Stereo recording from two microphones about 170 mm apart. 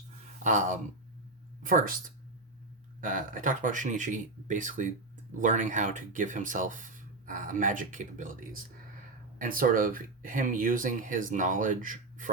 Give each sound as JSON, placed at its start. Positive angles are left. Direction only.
{"t": 0.4, "sound": "speech", "side_deg": -50}
{"t": 3.0, "sound": "speech", "side_deg": -50}